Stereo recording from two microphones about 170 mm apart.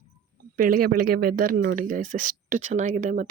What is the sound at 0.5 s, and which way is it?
Speech, 60° right (ahead or behind).